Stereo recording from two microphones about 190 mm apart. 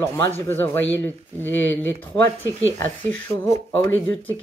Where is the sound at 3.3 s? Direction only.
15° left (ahead or behind).